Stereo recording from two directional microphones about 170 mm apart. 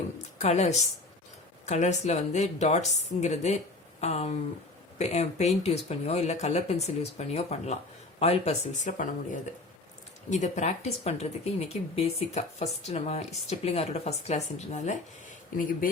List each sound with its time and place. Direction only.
0.3 s a woman's voice: 40° left (ahead or behind)